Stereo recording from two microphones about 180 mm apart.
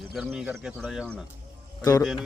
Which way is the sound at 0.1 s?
5° right (ahead or behind).